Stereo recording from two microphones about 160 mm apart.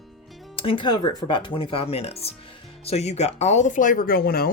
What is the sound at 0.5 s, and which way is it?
Speech, 35° left (ahead or behind).